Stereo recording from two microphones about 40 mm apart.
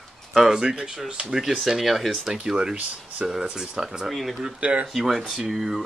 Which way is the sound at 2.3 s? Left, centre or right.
Centre.